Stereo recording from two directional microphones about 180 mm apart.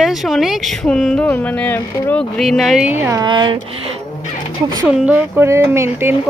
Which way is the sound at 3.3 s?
25° right (ahead or behind).